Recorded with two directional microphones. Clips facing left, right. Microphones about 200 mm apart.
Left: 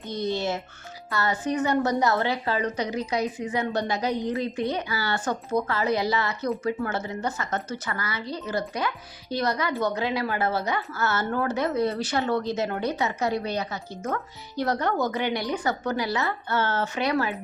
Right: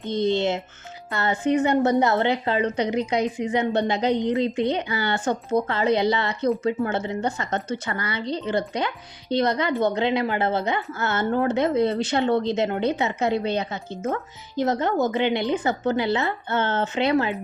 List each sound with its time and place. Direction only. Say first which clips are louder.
0.0 s a woman's voice: right 5 dB; 25° right (ahead or behind)